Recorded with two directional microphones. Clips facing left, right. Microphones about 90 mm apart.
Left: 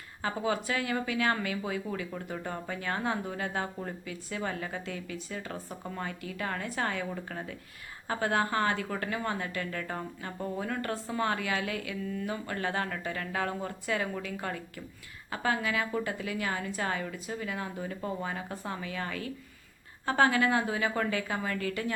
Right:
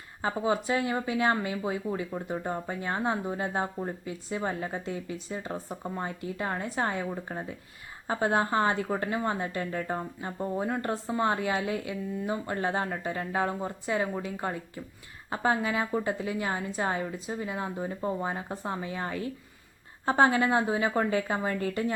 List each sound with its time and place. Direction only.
0.2 s speech: 25° right (ahead or behind)